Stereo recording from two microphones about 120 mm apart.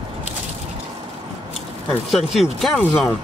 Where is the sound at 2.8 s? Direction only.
15° left (ahead or behind).